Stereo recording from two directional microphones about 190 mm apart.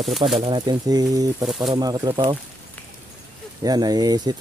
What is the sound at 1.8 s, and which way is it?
Speech, 20° right (ahead or behind).